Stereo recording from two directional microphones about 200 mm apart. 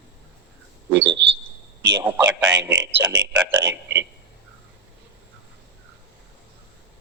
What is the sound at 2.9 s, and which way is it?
A man's voice, 65° right (ahead or behind).